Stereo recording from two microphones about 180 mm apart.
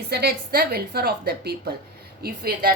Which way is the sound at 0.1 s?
60° right (ahead or behind).